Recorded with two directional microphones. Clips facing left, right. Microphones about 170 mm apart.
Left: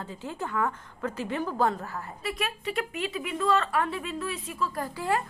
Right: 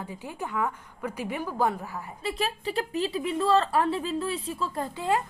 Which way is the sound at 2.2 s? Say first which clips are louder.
Right 3 dB; 30° right (ahead or behind).